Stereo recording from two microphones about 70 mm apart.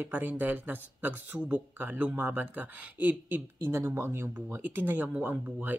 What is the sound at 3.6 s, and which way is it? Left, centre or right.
Speech, right.